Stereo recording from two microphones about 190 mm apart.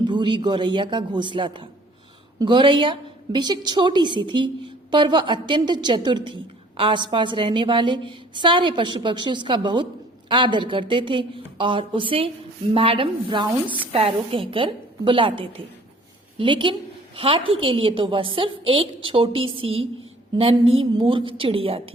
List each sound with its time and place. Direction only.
0.1 s a woman's voice: 25° right (ahead or behind)